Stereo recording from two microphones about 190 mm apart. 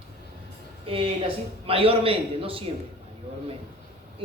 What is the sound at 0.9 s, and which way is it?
Speech, 30° right (ahead or behind).